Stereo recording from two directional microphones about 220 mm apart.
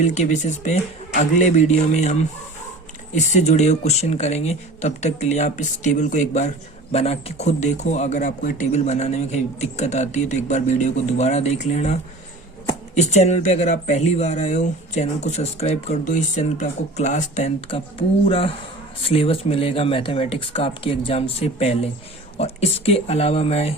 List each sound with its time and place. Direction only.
0.0 s speech: 30° left (ahead or behind)
3.2 s speech: 30° left (ahead or behind)